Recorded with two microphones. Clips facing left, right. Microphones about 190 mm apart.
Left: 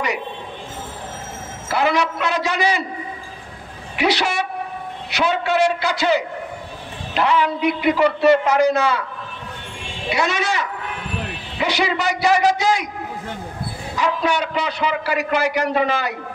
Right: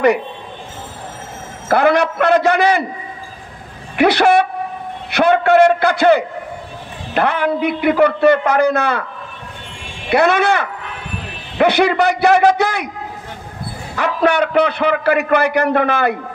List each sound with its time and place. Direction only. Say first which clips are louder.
1.7 s a man's voice: right 6 dB; 55° right (ahead or behind)
3.9 s a man's voice: right 8 dB; 55° right (ahead or behind)
10.0 s a man's voice: right 8 dB; 55° right (ahead or behind)
13.9 s a man's voice: right 5 dB; 60° right (ahead or behind)